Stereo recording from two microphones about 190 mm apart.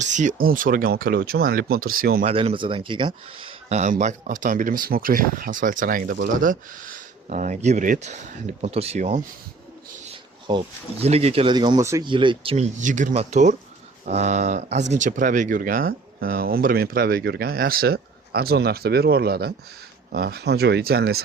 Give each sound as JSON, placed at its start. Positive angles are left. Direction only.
{"t": 0.0, "sound": "speech", "side_deg": -40}
{"t": 2.2, "sound": "speech", "side_deg": -30}
{"t": 10.5, "sound": "speech", "side_deg": -25}
{"t": 12.8, "sound": "speech", "side_deg": -40}